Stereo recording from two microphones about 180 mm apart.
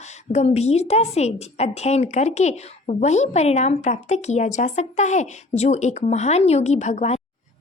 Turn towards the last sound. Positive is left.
turn(degrees=40)  # may be behind; listen again after turning